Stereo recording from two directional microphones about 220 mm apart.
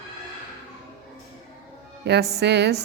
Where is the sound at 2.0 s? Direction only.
50° right (ahead or behind).